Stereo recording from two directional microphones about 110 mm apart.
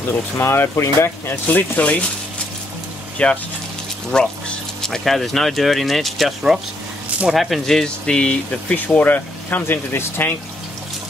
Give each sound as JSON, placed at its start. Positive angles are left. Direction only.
{"t": 0.4, "sound": "speech", "side_deg": 25}
{"t": 3.2, "sound": "speech", "side_deg": 10}